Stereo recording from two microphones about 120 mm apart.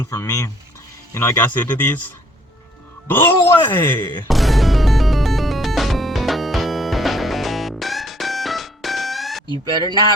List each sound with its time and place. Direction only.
0.0 s speech: 25° left (ahead or behind)
4.3 s music: centre (ahead or behind)